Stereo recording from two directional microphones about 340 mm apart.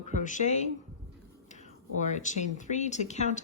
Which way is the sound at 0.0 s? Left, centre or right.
Left.